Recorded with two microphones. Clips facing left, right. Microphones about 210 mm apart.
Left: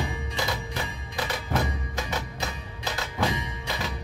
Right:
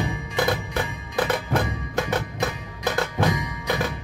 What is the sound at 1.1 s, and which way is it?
Music, 55° right (ahead or behind).